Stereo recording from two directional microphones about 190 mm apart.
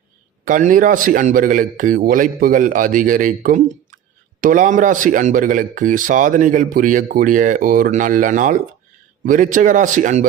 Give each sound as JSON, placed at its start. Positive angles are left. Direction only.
{"t": 0.4, "sound": "speech", "side_deg": -45}